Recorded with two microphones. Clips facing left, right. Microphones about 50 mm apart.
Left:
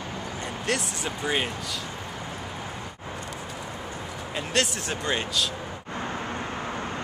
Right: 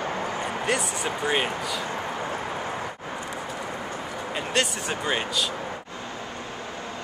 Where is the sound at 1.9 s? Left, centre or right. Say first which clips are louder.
Right 6 dB; right.